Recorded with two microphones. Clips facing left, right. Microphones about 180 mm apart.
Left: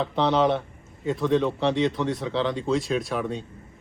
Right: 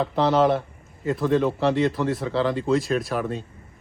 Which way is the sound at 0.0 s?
5° right (ahead or behind).